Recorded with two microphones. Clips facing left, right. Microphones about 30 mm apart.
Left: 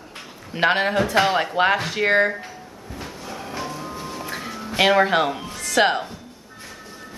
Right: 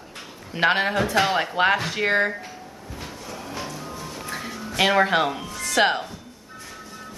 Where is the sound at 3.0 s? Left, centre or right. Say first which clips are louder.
Left 3 dB; centre.